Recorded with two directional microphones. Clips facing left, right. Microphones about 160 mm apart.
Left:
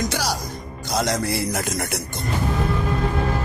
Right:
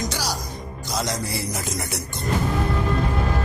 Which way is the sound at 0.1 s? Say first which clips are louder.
Left 3 dB; 55° left (ahead or behind).